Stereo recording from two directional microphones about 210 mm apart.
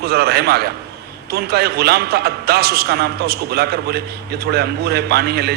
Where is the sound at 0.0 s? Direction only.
50° right (ahead or behind).